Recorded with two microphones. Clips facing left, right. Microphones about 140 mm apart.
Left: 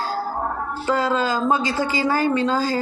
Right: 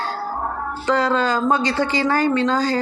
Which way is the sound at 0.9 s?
10° left (ahead or behind).